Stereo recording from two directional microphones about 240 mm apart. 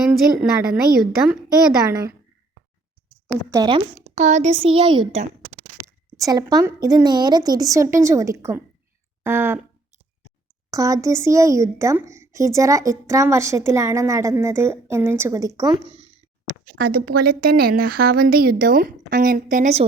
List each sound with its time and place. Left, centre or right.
0.1 s a woman's voice: centre
1.9 s a woman's voice: centre
3.5 s a woman's voice: centre
10.7 s a woman's voice: centre
16.7 s a woman's voice: right